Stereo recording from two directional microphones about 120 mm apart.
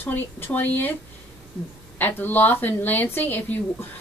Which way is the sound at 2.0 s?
15° left (ahead or behind).